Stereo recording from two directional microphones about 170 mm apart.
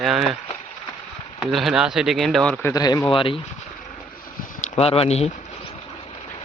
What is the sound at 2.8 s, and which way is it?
Speech, 25° left (ahead or behind).